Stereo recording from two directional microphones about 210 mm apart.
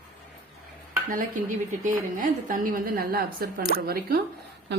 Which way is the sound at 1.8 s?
40° right (ahead or behind).